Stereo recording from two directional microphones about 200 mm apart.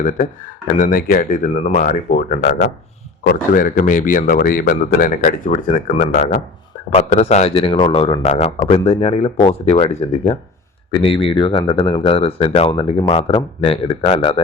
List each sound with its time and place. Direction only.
0.0 s a man's voice: 40° left (ahead or behind)